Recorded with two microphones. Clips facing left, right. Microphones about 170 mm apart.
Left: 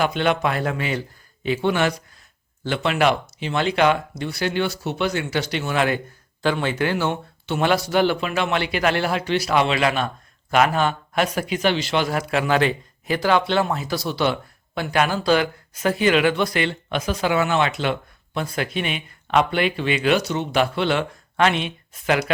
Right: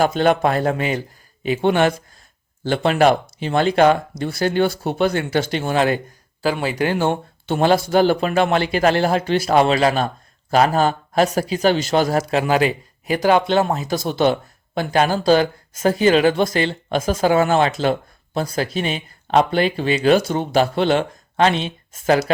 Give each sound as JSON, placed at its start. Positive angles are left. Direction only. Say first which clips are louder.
{"t": 0.0, "sound": "speech", "louder": "right 4 dB", "side_deg": -40}
{"t": 1.6, "sound": "speech", "louder": "right 5 dB", "side_deg": -50}
{"t": 2.6, "sound": "speech", "louder": "right 4 dB", "side_deg": -40}
{"t": 6.4, "sound": "speech", "louder": "right 1 dB", "side_deg": -5}
{"t": 6.8, "sound": "speech", "louder": "right 6 dB", "side_deg": -45}
{"t": 12.5, "sound": "a man's voice", "louder": "right 2 dB", "side_deg": -10}
{"t": 13.5, "sound": "speech", "louder": "right 3 dB", "side_deg": -40}